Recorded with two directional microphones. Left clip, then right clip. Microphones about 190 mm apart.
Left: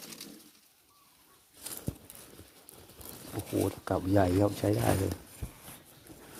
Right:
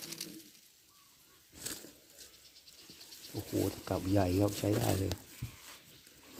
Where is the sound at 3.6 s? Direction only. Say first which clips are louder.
Left 4 dB; 20° left (ahead or behind).